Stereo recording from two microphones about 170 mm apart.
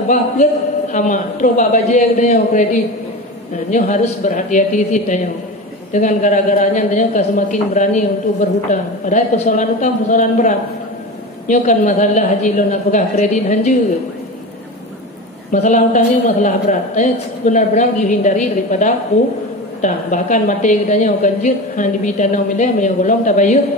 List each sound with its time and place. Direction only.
0.9 s a woman's voice: 50° left (ahead or behind)
15.5 s a woman's voice: 45° left (ahead or behind)